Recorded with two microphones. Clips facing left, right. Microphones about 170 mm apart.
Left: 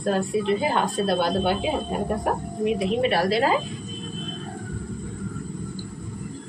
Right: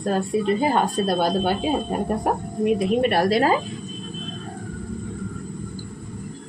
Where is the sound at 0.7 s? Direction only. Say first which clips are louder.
Right 2 dB; 45° right (ahead or behind).